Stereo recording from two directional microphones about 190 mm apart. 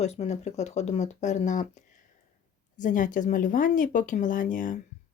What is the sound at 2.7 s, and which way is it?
Speech, 45° left (ahead or behind).